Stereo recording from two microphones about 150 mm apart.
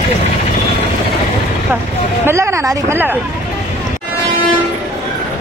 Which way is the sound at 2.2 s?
20° right (ahead or behind).